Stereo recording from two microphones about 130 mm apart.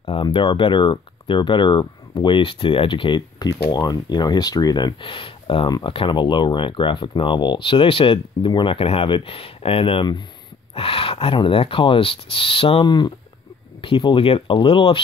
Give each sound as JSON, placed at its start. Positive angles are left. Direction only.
{"t": 0.0, "sound": "speech", "side_deg": 40}